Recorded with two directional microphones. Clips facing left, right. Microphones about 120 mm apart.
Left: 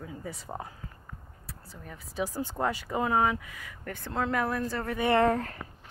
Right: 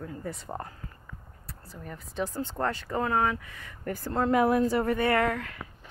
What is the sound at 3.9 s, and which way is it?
Speech, 5° right (ahead or behind).